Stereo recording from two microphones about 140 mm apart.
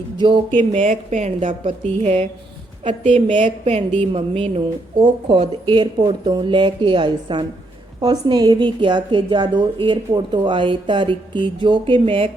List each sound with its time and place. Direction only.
0.2 s a woman's voice: 35° right (ahead or behind)
0.7 s speech: 60° right (ahead or behind)
1.6 s a woman's voice: 45° right (ahead or behind)